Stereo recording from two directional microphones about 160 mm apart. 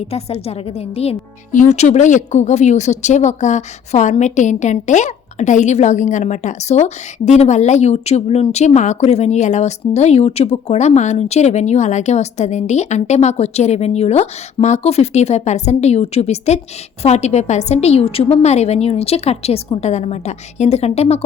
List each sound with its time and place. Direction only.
0.1 s a woman's voice: 40° left (ahead or behind)